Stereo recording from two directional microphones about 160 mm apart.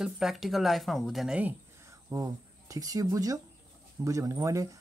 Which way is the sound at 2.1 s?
20° right (ahead or behind).